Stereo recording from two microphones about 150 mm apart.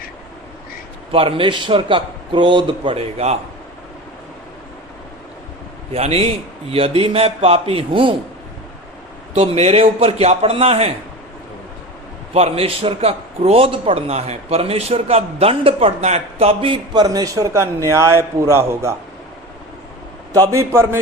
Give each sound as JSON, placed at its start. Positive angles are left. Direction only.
{"t": 1.1, "sound": "a man's voice", "side_deg": -35}
{"t": 5.9, "sound": "a man's voice", "side_deg": -40}
{"t": 9.3, "sound": "a man's voice", "side_deg": -45}
{"t": 12.3, "sound": "a man's voice", "side_deg": -45}
{"t": 20.3, "sound": "a man's voice", "side_deg": -20}